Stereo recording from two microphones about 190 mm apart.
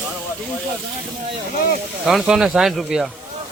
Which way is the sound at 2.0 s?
Centre (ahead or behind).